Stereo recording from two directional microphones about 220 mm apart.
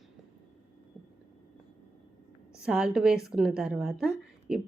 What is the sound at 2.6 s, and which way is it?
A woman's voice, 5° right (ahead or behind).